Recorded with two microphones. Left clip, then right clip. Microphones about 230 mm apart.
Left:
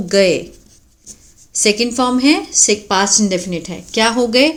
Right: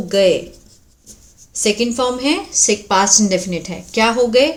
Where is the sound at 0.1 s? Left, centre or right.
Left.